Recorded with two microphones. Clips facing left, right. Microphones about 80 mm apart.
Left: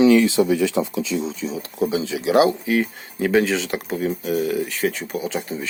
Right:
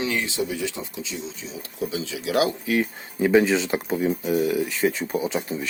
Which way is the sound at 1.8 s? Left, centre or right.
Left.